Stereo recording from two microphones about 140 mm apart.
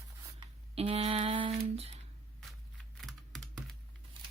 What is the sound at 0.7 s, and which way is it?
Speech, 45° right (ahead or behind).